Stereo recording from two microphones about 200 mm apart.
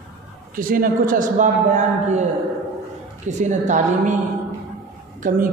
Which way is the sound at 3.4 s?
40° right (ahead or behind).